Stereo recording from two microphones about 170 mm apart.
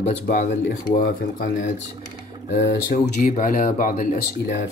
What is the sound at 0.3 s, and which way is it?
Speech, 65° left (ahead or behind).